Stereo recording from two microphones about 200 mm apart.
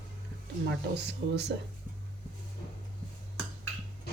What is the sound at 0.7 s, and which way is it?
Speech, 60° right (ahead or behind).